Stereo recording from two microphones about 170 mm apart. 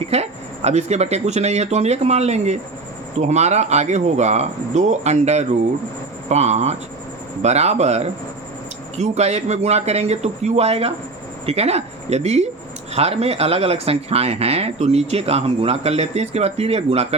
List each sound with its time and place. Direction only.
0.1 s speech: 40° right (ahead or behind)